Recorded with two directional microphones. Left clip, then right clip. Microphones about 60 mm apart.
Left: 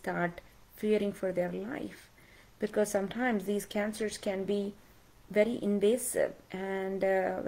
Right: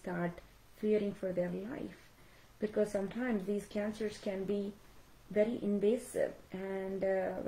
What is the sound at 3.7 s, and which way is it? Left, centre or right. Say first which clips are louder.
Speech: left 4 dB; left.